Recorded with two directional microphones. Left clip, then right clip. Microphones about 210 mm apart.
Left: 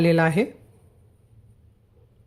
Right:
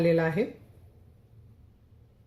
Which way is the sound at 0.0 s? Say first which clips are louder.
Left 5 dB; 35° left (ahead or behind).